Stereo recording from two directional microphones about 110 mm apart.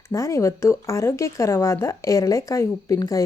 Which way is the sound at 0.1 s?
30° left (ahead or behind).